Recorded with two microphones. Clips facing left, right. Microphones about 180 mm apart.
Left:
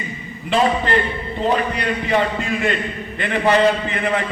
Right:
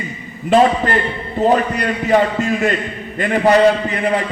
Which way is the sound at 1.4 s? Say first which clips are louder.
Right 5 dB; 45° right (ahead or behind).